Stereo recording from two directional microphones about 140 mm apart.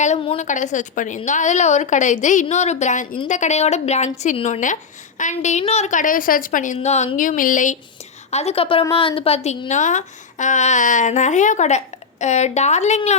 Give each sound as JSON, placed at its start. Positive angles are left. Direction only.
{"t": 0.3, "sound": "speech", "side_deg": 60}
{"t": 6.7, "sound": "speech", "side_deg": 50}
{"t": 8.3, "sound": "a woman's voice", "side_deg": 50}
{"t": 9.6, "sound": "a woman's voice", "side_deg": 60}